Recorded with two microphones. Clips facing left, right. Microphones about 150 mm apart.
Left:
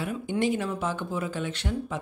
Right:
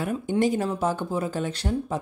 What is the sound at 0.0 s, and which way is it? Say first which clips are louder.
Speech: right 4 dB; 40° right (ahead or behind).